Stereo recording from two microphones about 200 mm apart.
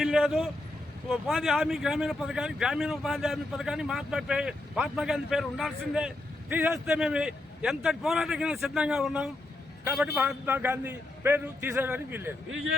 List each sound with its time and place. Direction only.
0.0 s vehicle: centre (ahead or behind)
1.1 s a man's voice: centre (ahead or behind)
12.5 s speech: 85° right